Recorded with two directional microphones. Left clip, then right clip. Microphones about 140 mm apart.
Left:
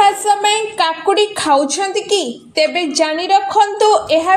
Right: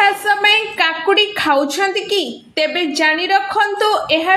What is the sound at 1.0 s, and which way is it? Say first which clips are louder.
A woman's voice: right 1 dB; 45° left (ahead or behind).